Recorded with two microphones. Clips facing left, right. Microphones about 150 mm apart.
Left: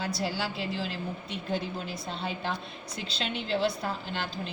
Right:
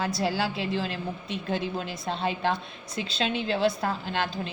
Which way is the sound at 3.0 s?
50° right (ahead or behind).